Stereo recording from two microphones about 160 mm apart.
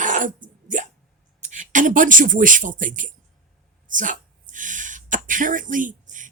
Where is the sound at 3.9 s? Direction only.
55° right (ahead or behind).